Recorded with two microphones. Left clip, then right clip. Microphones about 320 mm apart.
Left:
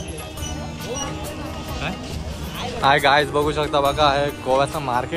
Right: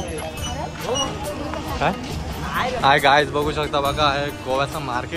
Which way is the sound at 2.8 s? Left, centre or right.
Centre.